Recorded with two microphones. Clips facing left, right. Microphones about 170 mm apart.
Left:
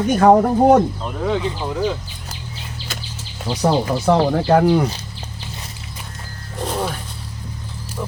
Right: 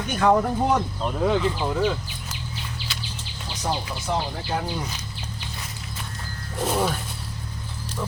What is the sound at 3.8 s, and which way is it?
Speech, 70° left (ahead or behind).